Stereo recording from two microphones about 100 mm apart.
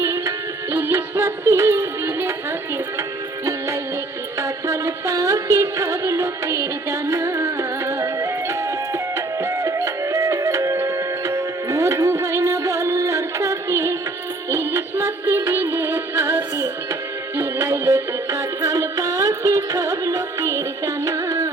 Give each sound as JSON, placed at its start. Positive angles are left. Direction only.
{"t": 0.0, "sound": "music", "side_deg": -30}
{"t": 4.4, "sound": "music", "side_deg": -30}